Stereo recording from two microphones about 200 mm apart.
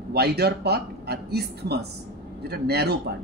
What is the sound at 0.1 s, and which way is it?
A man's voice, 55° right (ahead or behind).